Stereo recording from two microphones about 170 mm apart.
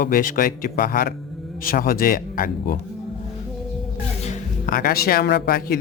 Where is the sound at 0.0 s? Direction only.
55° left (ahead or behind).